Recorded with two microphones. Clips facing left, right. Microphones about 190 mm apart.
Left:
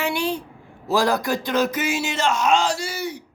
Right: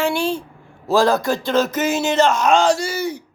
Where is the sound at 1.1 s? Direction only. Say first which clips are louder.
Right 4 dB; 25° right (ahead or behind).